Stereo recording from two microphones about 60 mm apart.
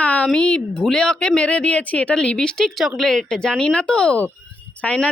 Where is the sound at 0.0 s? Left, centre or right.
Left.